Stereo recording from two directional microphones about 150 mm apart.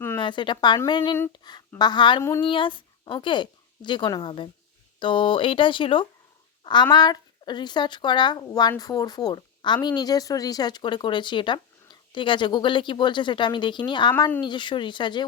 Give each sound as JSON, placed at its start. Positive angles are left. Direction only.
{"t": 0.2, "sound": "a woman's voice", "side_deg": 30}